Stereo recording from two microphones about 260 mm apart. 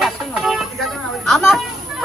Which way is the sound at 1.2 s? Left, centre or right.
Centre.